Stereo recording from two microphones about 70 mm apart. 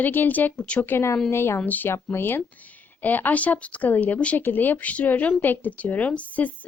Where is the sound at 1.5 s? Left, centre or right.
Left.